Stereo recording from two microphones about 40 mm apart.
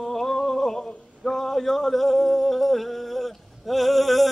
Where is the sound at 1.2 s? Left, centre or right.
Centre.